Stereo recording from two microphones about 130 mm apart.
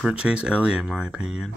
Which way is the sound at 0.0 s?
10° right (ahead or behind).